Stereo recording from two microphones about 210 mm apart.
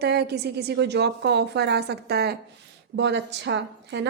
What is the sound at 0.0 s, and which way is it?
A woman's voice, 50° right (ahead or behind).